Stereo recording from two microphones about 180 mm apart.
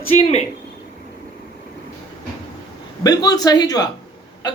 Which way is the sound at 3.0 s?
20° left (ahead or behind).